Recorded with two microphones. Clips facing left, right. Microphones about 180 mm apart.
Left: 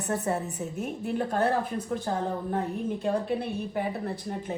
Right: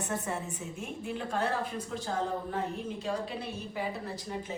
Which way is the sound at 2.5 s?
55° left (ahead or behind).